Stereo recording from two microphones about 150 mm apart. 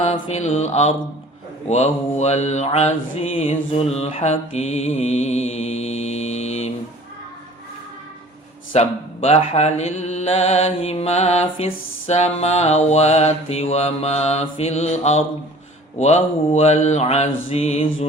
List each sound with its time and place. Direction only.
0.3 s speech: 45° left (ahead or behind)
8.7 s speech: 45° left (ahead or behind)